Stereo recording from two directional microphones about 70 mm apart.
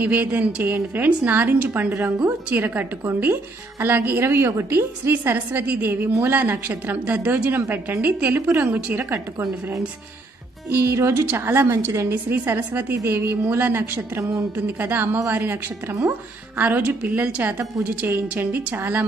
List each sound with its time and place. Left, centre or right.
0.0 s a woman's voice: right
9.1 s a woman's voice: right
10.7 s a woman's voice: right
12.1 s a woman's voice: right